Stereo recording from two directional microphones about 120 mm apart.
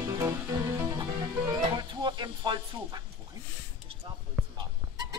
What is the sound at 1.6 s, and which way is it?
Music, 40° right (ahead or behind).